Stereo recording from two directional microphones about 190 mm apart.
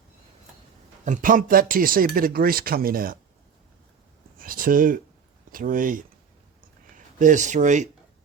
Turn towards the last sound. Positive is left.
turn(degrees=-40)  # may be behind; listen again after turning